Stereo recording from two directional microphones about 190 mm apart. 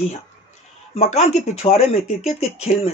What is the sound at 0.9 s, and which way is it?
A man's voice, 35° left (ahead or behind).